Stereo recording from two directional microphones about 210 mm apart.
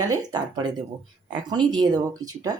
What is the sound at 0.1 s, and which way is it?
Speech, 15° right (ahead or behind).